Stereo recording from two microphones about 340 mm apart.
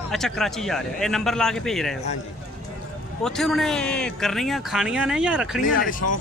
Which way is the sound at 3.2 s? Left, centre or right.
Centre.